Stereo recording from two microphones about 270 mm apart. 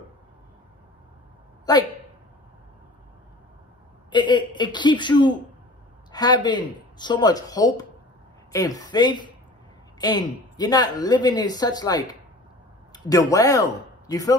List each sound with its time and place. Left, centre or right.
1.7 s speech: centre
4.1 s a woman's voice: centre
12.9 s a sound: centre
13.3 s speech: centre